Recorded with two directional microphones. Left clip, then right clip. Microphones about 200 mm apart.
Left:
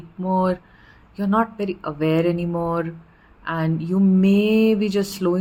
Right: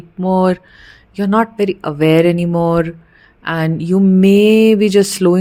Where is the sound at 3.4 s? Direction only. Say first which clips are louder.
Right 7 dB; 45° right (ahead or behind).